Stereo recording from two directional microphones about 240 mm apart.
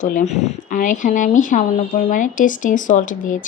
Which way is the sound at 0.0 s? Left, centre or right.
Left.